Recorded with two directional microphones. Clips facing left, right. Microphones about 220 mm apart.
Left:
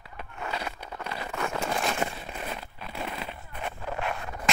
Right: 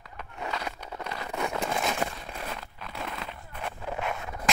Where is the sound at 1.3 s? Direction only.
10° right (ahead or behind); by 3.7 s 10° left (ahead or behind).